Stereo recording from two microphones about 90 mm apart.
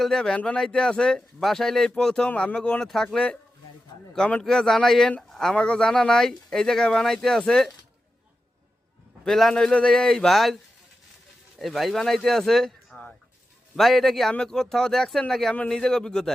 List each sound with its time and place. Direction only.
0.0 s speech: 5° left (ahead or behind)
4.4 s speech: 5° left (ahead or behind)
9.2 s speech: 5° left (ahead or behind)
11.6 s a man's voice: centre (ahead or behind)
15.5 s speech: 15° left (ahead or behind)